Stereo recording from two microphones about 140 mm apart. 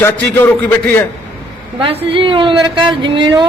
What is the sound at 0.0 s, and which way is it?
A man's voice, 15° left (ahead or behind).